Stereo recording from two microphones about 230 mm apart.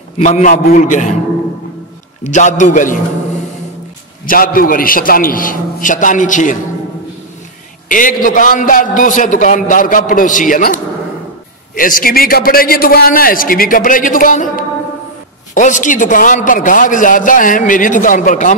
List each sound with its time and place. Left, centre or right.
0.2 s a man's voice: left
2.2 s a man's voice: left
4.3 s a man's voice: left
7.9 s a man's voice: left